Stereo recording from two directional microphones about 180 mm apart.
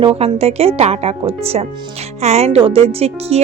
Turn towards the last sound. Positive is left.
turn(degrees=-35)  # may be behind; listen again after turning